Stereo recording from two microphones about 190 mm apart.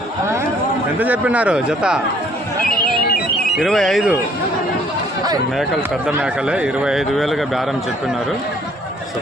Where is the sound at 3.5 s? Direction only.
Centre (ahead or behind).